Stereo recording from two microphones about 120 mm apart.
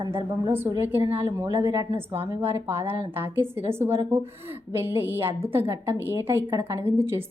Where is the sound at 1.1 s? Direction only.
20° right (ahead or behind).